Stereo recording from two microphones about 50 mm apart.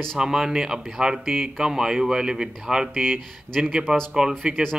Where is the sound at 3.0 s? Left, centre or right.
Centre.